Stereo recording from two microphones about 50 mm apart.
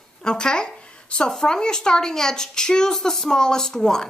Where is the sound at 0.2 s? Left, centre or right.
Centre.